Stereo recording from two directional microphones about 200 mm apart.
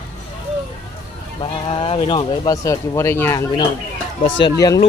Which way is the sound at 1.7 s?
25° left (ahead or behind).